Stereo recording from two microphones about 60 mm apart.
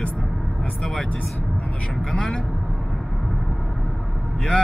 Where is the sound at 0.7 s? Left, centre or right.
Centre.